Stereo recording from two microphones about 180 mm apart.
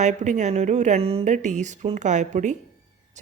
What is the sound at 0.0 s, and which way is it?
Speech, 40° right (ahead or behind).